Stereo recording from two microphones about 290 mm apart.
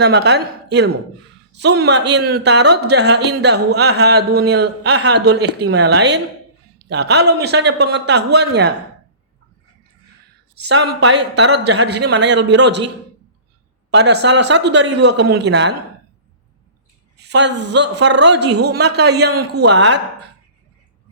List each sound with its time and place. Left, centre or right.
0.0 s speech: right
10.5 s speech: right
13.9 s speech: right
17.2 s speech: right